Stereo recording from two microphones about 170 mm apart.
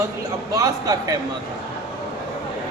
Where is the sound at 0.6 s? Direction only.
20° right (ahead or behind).